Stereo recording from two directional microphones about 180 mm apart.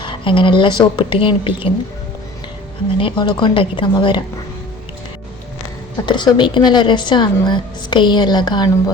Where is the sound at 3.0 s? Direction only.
30° left (ahead or behind).